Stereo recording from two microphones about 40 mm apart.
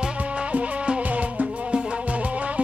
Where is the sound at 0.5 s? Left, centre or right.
Right.